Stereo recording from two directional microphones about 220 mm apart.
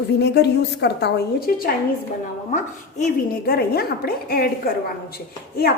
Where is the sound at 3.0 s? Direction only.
45° left (ahead or behind).